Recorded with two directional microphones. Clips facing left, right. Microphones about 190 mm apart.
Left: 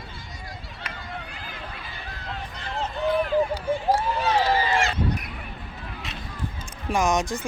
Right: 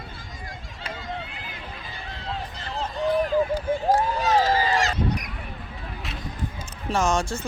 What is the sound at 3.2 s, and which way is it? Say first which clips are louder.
Run: right 1 dB; 45° right (ahead or behind).